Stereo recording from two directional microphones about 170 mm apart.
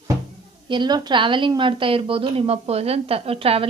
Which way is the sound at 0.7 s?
25° right (ahead or behind).